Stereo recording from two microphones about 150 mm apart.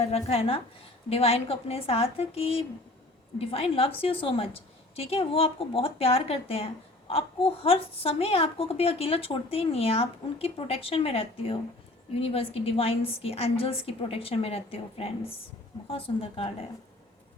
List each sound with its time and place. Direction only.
0.0 s a woman's voice: 45° left (ahead or behind)